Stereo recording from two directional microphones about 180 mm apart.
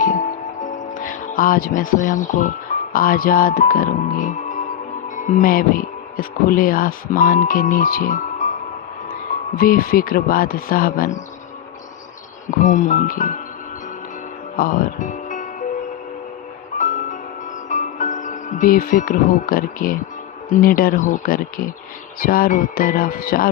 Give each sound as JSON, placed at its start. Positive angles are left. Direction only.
{"t": 0.6, "sound": "music", "side_deg": 50}
{"t": 2.9, "sound": "speech", "side_deg": 50}
{"t": 9.6, "sound": "speech", "side_deg": 55}
{"t": 12.5, "sound": "speech", "side_deg": 45}
{"t": 14.5, "sound": "music", "side_deg": 50}
{"t": 16.7, "sound": "music", "side_deg": 45}
{"t": 20.5, "sound": "speech", "side_deg": 50}